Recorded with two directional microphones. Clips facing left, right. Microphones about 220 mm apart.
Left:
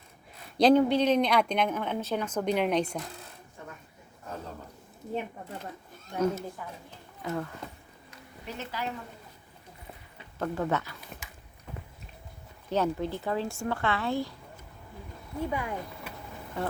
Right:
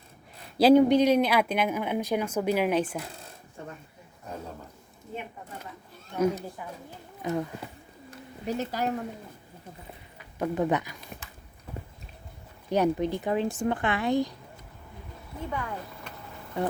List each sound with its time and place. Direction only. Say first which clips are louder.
0.5 s speech: right 3 dB; 10° right (ahead or behind)
6.1 s speech: right 2 dB; 15° right (ahead or behind)
8.4 s a woman's voice: right 7 dB; 45° right (ahead or behind)
10.3 s speech: right 3 dB; 15° right (ahead or behind)
12.7 s speech: right 4 dB; 15° right (ahead or behind)
15.4 s speech: even; 10° left (ahead or behind)